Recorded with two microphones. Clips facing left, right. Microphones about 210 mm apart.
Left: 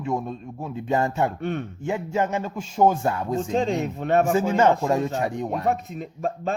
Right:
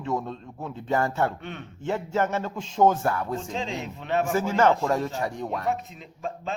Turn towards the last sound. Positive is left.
turn(degrees=50)  # may be behind; listen again after turning